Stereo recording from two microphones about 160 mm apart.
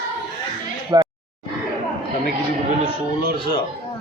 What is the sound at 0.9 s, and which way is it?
Speech, 25° right (ahead or behind).